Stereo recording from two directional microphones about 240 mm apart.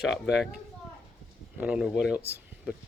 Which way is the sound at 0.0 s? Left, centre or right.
Centre.